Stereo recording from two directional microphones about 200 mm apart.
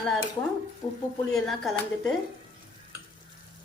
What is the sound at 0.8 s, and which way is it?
Speech, 25° left (ahead or behind).